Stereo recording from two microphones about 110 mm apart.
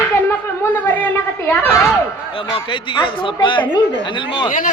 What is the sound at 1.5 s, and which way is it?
Speech, 25° left (ahead or behind).